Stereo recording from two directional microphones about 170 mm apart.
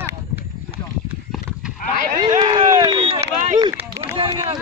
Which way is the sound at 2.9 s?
30° right (ahead or behind).